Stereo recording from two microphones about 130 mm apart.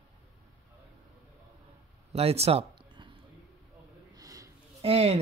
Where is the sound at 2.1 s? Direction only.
50° right (ahead or behind).